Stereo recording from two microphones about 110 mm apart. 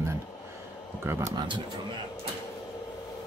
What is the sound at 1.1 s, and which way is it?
Speech, 25° right (ahead or behind).